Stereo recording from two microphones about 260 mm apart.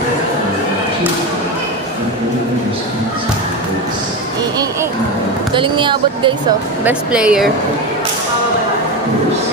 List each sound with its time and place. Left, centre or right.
5.5 s speech: centre
6.8 s speech: centre